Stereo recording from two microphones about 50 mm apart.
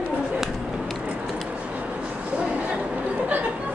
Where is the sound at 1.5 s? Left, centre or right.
Right.